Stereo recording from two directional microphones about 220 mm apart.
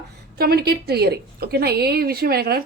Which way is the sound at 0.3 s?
45° right (ahead or behind).